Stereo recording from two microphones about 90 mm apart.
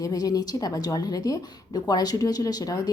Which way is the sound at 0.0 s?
45° left (ahead or behind).